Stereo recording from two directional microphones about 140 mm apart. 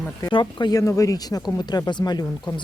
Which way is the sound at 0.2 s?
35° left (ahead or behind).